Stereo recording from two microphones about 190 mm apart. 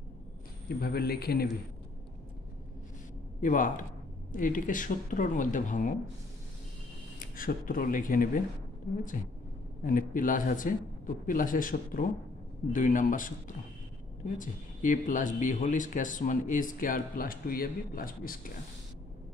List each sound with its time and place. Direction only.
0.7 s a man's voice: 55° left (ahead or behind)
3.3 s speech: 45° left (ahead or behind)
7.2 s speech: 45° left (ahead or behind)
9.8 s speech: 45° left (ahead or behind)
14.4 s speech: 45° left (ahead or behind)